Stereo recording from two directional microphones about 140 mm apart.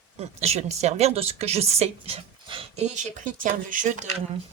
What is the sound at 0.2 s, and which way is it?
Speech, 50° right (ahead or behind).